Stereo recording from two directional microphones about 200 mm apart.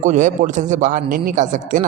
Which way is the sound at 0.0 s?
35° right (ahead or behind).